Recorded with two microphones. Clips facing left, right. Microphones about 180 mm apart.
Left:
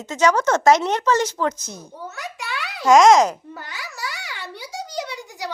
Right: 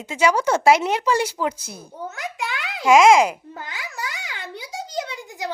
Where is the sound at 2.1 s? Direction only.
90° right.